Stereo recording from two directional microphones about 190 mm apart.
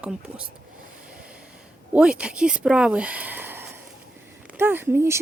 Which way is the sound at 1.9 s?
5° right (ahead or behind).